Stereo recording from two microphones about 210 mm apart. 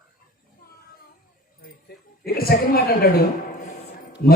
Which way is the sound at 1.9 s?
50° left (ahead or behind).